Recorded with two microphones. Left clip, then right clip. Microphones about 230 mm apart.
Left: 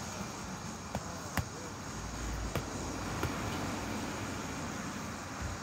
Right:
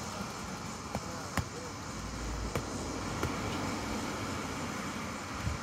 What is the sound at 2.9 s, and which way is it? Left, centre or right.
Vehicle, centre.